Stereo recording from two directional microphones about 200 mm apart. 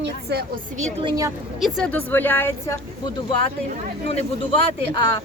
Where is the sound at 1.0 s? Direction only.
15° right (ahead or behind).